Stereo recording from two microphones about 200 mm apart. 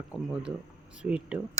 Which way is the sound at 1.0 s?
5° right (ahead or behind).